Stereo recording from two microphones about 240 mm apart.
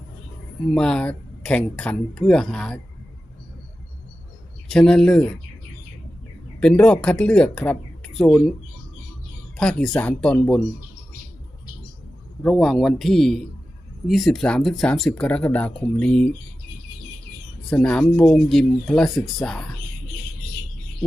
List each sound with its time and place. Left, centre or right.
0.7 s speech: centre
4.7 s speech: centre
6.6 s speech: centre
9.6 s speech: centre
12.4 s speech: centre
17.7 s speech: centre